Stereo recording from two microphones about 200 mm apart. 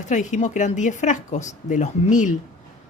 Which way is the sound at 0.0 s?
40° left (ahead or behind).